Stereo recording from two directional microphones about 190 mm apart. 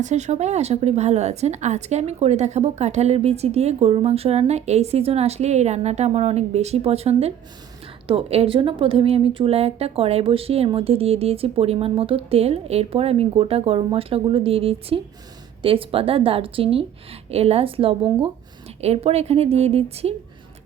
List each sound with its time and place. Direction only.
0.0 s a woman's voice: 40° right (ahead or behind)